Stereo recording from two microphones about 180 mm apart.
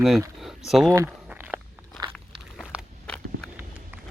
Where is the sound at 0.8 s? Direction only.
20° right (ahead or behind).